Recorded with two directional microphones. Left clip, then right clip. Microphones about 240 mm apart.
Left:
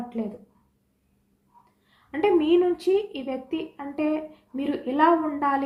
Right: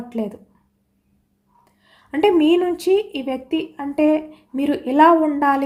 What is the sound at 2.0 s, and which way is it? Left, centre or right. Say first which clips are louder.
A woman's voice: right 6 dB; right.